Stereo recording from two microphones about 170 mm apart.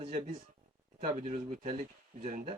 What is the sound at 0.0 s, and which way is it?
Speech, 45° right (ahead or behind).